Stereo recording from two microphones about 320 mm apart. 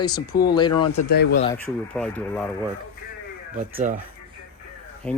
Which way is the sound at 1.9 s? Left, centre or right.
Centre.